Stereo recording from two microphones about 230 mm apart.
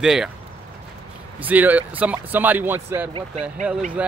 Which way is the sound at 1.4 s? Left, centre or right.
Centre.